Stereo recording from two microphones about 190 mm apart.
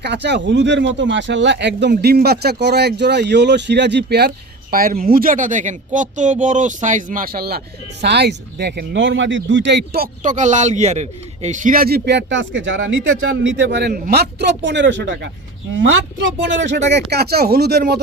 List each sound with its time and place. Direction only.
0.0 s a man's voice: 65° right (ahead or behind)
4.7 s a woman's voice: 50° right (ahead or behind); by 16.8 s 70° right (ahead or behind)
17.1 s a man's voice: 55° right (ahead or behind)